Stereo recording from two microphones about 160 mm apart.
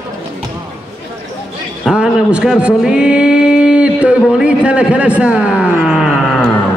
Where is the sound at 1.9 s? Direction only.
5° right (ahead or behind).